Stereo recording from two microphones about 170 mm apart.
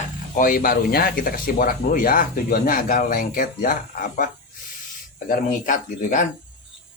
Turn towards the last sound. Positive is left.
turn(degrees=45)  # may be behind; listen again after turning